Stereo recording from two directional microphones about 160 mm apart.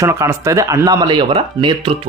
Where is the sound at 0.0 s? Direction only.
20° right (ahead or behind).